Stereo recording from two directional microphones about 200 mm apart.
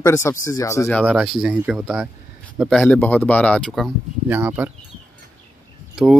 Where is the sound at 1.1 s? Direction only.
5° right (ahead or behind).